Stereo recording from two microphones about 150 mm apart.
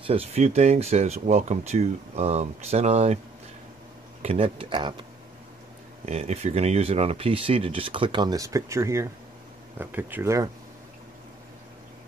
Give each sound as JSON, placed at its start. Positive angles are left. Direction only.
{"t": 0.0, "sound": "speech", "side_deg": -40}
{"t": 4.2, "sound": "speech", "side_deg": -40}
{"t": 6.0, "sound": "speech", "side_deg": -45}